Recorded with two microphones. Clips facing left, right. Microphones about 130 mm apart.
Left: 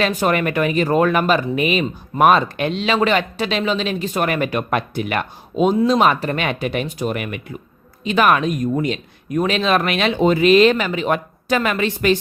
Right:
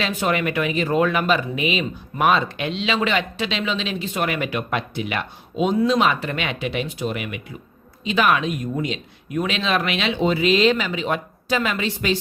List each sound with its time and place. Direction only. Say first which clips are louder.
0.0 s speech: left 4 dB; 45° left (ahead or behind)